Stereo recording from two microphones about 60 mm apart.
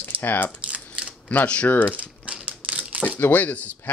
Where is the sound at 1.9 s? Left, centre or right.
Right.